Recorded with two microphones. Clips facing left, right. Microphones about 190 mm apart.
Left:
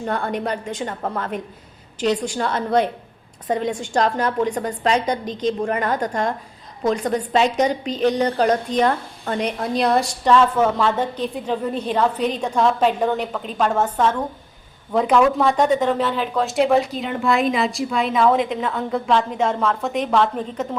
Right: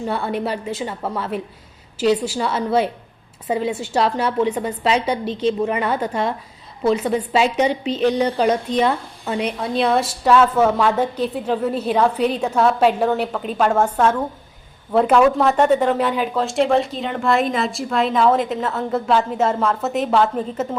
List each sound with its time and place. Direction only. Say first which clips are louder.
0.1 s a woman's voice: even; 5° right (ahead or behind)
5.2 s a woman's voice: right 2 dB; 40° left (ahead or behind)
5.8 s a woman's voice: right 1 dB; 5° right (ahead or behind)
7.7 s a woman's voice: right 2 dB; 40° left (ahead or behind)
8.2 s a woman's voice: even; 10° right (ahead or behind)